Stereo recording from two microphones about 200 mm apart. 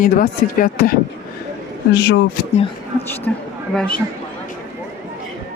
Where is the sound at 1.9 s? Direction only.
60° left (ahead or behind).